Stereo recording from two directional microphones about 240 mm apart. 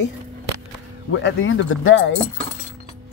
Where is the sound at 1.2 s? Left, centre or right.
Left.